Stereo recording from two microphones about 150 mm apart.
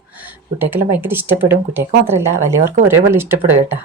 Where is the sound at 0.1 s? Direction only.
10° right (ahead or behind).